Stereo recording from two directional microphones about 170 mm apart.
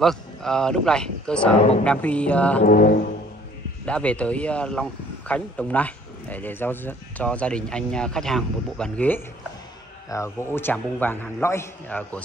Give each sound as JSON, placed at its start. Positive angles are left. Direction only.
{"t": 0.0, "sound": "speech", "side_deg": 5}
{"t": 2.6, "sound": "speech", "side_deg": 60}
{"t": 3.8, "sound": "speech", "side_deg": 5}